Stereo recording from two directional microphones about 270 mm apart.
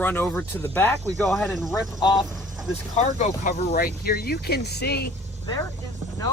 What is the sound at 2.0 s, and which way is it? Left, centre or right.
Speech, centre.